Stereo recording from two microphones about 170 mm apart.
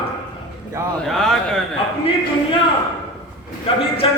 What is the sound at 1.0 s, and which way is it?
Speech, centre (ahead or behind).